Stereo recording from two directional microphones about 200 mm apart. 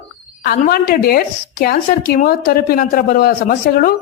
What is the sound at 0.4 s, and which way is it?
Speech, 50° left (ahead or behind).